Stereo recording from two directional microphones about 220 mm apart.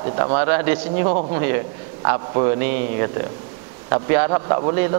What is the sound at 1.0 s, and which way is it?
Speech, 30° right (ahead or behind).